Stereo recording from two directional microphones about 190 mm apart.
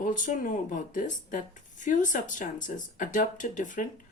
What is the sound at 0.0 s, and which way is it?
A woman's voice, 45° left (ahead or behind).